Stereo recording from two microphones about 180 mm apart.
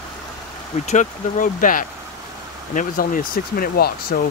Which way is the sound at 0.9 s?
45° left (ahead or behind).